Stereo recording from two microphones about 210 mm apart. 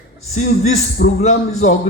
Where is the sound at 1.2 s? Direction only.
35° left (ahead or behind).